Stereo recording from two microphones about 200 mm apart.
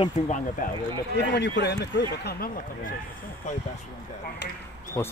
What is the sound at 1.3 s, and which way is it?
Speech, 60° left (ahead or behind).